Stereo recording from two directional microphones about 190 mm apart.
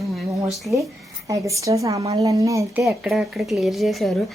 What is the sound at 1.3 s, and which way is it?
Speech, 15° right (ahead or behind).